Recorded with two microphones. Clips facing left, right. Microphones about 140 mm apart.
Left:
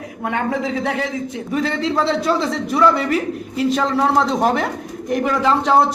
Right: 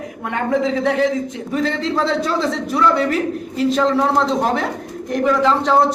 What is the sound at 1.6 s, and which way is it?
A man's voice, 5° left (ahead or behind).